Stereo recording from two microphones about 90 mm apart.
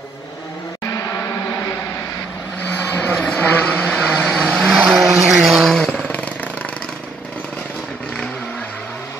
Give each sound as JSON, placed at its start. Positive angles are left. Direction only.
{"t": 2.7, "sound": "vehicle", "side_deg": 15}
{"t": 4.2, "sound": "vehicle", "side_deg": 0}
{"t": 6.1, "sound": "vehicle", "side_deg": 15}